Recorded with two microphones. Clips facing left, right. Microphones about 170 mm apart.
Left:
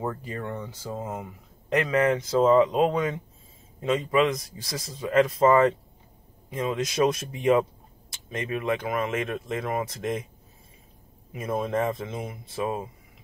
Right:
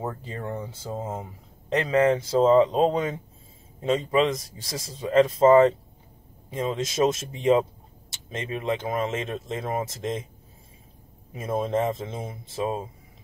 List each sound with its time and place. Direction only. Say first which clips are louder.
0.0 s speech: left 1 dB; 25° right (ahead or behind)
11.3 s speech: right 1 dB; 25° right (ahead or behind)